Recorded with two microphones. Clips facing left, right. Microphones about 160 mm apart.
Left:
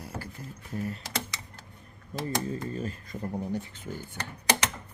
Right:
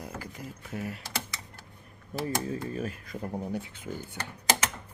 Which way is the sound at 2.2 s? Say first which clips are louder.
Even; 5° right (ahead or behind).